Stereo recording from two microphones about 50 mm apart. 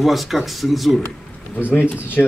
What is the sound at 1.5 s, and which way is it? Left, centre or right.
Speech, left.